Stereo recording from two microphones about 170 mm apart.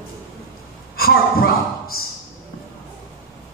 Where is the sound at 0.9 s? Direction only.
60° left (ahead or behind).